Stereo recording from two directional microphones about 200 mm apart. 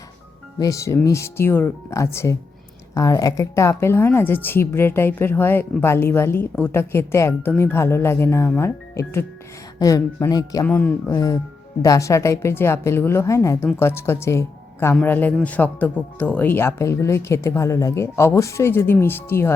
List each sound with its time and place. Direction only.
0.6 s speech: 15° left (ahead or behind)
10.7 s speech: 5° left (ahead or behind)
11.1 s speech: 15° left (ahead or behind)